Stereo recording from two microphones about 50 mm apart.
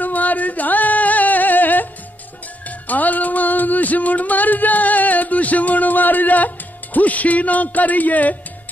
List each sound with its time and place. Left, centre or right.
0.0 s music: left